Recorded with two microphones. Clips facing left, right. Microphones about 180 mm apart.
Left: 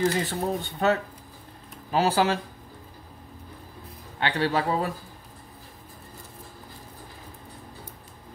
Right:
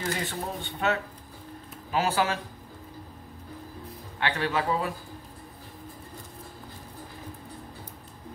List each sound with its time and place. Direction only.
0.0 s speech: 40° left (ahead or behind)
4.2 s speech: 35° left (ahead or behind)